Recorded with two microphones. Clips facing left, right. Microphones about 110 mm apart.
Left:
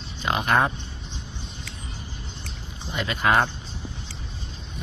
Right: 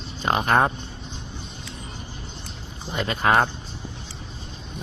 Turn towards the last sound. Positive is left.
turn(degrees=-35)  # may be behind; listen again after turning